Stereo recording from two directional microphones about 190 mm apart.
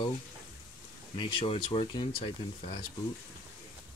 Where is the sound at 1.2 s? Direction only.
25° left (ahead or behind).